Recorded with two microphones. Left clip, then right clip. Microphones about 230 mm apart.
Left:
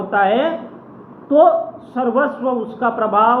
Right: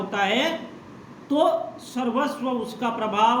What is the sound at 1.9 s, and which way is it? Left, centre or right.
A man's voice, right.